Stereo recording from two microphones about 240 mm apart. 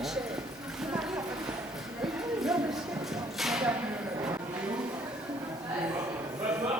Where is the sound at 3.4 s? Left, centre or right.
Centre.